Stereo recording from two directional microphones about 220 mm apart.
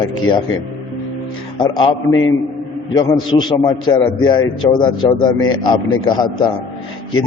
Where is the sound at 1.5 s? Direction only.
20° left (ahead or behind).